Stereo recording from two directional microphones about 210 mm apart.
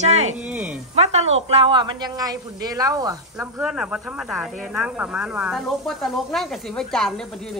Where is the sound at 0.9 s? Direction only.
30° right (ahead or behind).